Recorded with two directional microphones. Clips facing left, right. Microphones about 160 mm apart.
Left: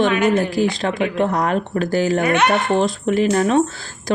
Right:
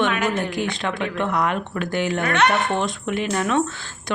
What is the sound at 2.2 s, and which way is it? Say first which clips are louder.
Speech: left 3 dB; 5° left (ahead or behind).